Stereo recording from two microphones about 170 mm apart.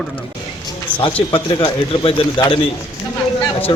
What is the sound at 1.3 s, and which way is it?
Speech, 30° left (ahead or behind).